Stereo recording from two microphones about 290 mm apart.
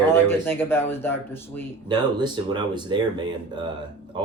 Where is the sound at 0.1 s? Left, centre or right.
Centre.